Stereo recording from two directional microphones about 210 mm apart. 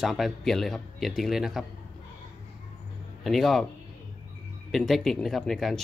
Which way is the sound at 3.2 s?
Centre (ahead or behind).